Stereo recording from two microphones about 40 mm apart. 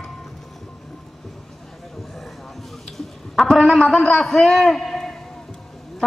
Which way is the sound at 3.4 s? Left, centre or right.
Centre.